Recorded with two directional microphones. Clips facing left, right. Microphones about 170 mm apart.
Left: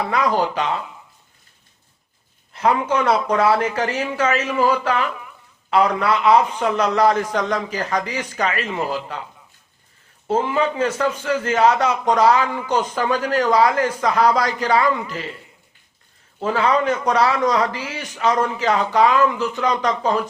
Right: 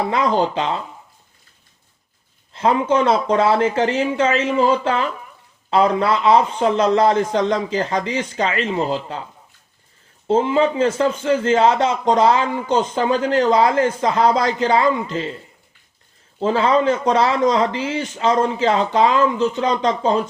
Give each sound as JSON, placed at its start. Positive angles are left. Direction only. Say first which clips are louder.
{"t": 0.1, "sound": "a man's voice", "louder": "right 1 dB", "side_deg": -25}
{"t": 2.5, "sound": "a man's voice", "louder": "right 2 dB", "side_deg": -25}
{"t": 10.2, "sound": "a man's voice", "louder": "right 3 dB", "side_deg": -25}
{"t": 16.4, "sound": "a man's voice", "louder": "right 2 dB", "side_deg": -30}